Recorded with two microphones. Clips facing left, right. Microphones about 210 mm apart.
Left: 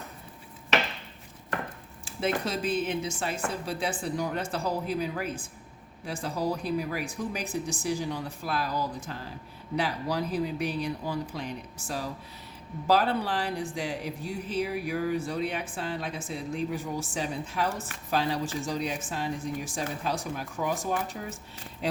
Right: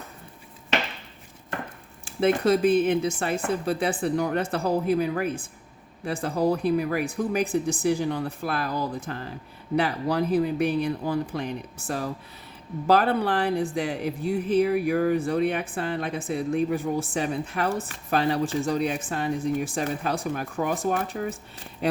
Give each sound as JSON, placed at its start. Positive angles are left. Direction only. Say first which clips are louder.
{"t": 2.0, "sound": "speech", "louder": "right 9 dB", "side_deg": -60}